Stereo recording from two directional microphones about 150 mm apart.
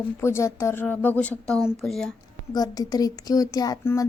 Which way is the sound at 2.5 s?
25° left (ahead or behind).